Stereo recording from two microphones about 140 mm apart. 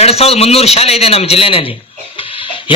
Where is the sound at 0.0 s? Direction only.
45° left (ahead or behind).